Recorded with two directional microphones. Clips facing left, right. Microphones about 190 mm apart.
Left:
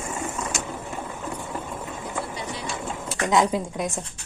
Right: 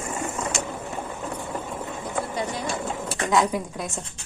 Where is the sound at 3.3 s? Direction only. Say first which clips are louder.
Left 1 dB; 20° left (ahead or behind).